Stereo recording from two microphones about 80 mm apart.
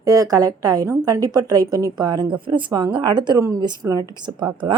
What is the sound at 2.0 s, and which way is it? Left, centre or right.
A woman's voice, right.